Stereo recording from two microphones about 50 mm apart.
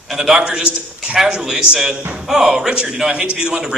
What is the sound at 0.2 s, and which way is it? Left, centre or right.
A man's voice, centre.